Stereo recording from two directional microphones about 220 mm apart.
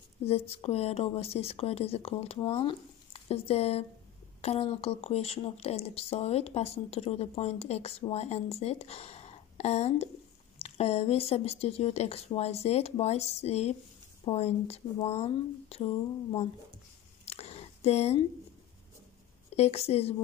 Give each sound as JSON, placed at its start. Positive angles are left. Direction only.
{"t": 0.2, "sound": "speech", "side_deg": 25}
{"t": 17.2, "sound": "a sound", "side_deg": 30}
{"t": 19.5, "sound": "speech", "side_deg": 30}